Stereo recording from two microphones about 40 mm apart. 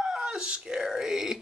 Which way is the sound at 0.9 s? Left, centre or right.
Centre.